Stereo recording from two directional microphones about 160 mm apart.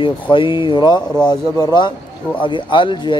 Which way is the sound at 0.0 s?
30° left (ahead or behind).